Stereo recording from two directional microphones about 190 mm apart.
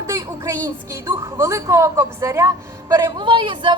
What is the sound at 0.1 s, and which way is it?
A woman's voice, 20° right (ahead or behind).